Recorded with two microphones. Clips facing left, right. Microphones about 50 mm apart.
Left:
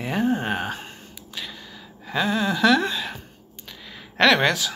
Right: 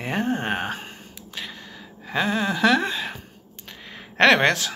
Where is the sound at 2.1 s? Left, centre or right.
Right.